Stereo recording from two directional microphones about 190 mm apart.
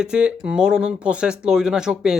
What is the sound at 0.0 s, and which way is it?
Speech, 5° right (ahead or behind).